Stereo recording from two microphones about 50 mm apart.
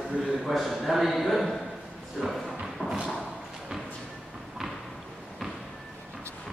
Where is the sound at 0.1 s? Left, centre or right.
Centre.